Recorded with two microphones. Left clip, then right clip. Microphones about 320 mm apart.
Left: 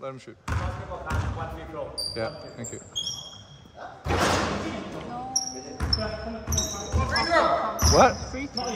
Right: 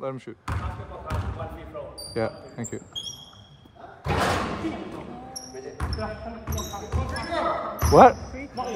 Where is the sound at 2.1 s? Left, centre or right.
Right.